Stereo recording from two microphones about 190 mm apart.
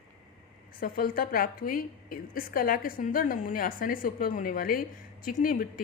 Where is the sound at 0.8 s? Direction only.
50° left (ahead or behind).